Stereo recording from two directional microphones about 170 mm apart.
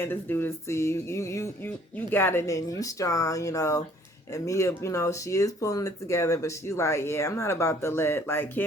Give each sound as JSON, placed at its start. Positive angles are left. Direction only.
{"t": 0.0, "sound": "speech", "side_deg": 10}